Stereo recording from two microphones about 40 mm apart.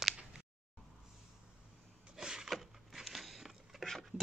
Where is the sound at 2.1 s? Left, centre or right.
Centre.